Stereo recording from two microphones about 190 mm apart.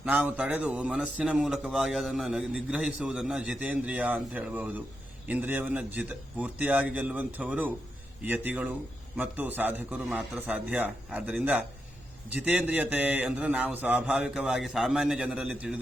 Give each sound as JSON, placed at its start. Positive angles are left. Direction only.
{"t": 0.0, "sound": "speech", "side_deg": -10}